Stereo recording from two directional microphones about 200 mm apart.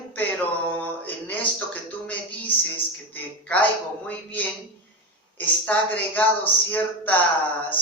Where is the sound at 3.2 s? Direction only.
10° left (ahead or behind).